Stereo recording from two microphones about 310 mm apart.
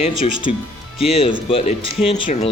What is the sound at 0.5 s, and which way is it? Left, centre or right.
Speech, left.